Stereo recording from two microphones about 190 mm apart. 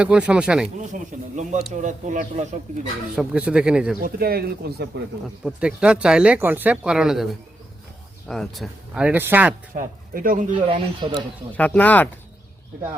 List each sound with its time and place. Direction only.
0.0 s speech: 5° right (ahead or behind)
0.8 s speech: 40° right (ahead or behind)
3.2 s speech: 5° right (ahead or behind)
4.0 s speech: 55° right (ahead or behind)
5.5 s speech: 5° right (ahead or behind)
8.3 s speech: centre (ahead or behind)
9.7 s speech: 45° right (ahead or behind)
10.5 s speech: 25° right (ahead or behind)
11.1 s speech: 5° left (ahead or behind)